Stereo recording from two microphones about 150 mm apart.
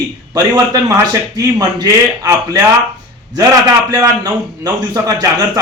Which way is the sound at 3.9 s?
25° right (ahead or behind).